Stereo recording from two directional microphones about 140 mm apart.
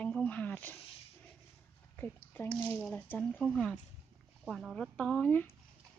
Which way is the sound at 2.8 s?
10° left (ahead or behind).